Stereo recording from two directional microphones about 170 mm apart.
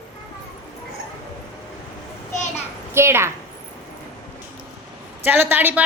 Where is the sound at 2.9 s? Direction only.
15° right (ahead or behind).